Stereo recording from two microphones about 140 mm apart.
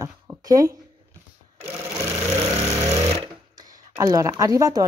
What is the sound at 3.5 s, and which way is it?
Speech, 25° right (ahead or behind).